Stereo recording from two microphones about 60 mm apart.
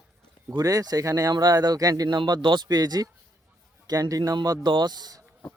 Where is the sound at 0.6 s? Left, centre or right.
Right.